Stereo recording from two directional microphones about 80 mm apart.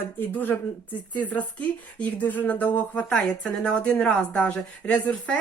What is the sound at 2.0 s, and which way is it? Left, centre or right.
Speech, left.